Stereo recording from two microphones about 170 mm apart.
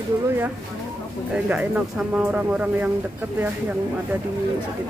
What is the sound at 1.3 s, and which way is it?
Speech, 5° right (ahead or behind).